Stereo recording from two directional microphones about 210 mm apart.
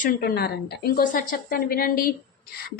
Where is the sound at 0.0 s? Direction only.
45° left (ahead or behind).